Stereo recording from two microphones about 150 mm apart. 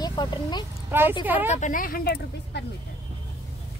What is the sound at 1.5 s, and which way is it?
Speech, 55° left (ahead or behind).